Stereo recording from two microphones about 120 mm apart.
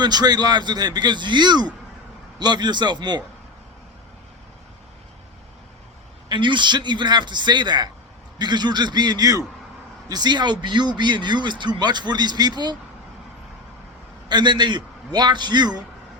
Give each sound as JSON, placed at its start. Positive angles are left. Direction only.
{"t": 0.0, "sound": "speech", "side_deg": -35}
{"t": 6.2, "sound": "speech", "side_deg": -40}
{"t": 14.3, "sound": "speech", "side_deg": -40}